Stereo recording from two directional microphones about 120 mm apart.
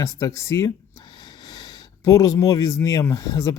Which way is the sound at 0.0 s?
25° left (ahead or behind).